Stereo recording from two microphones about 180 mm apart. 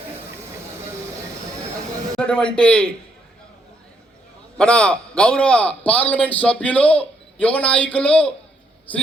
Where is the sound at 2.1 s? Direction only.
5° left (ahead or behind).